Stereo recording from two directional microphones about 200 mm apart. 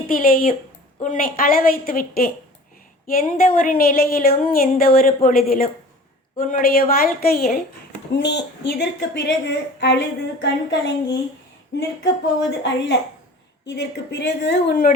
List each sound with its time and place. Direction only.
0.1 s a woman's voice: 45° left (ahead or behind); by 11.2 s 60° left (ahead or behind)
12.5 s a woman's voice: 60° left (ahead or behind)